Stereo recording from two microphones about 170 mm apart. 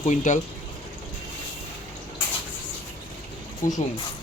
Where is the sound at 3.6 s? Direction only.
50° left (ahead or behind).